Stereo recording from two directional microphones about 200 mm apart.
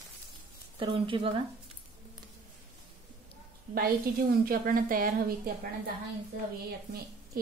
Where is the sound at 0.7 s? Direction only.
25° right (ahead or behind).